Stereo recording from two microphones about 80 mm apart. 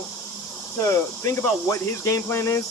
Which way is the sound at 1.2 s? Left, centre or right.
Left.